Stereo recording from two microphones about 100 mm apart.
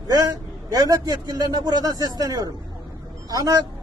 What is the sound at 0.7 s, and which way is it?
A man's voice, 35° right (ahead or behind).